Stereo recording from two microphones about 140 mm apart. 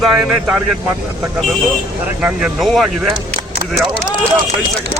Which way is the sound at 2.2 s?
10° right (ahead or behind).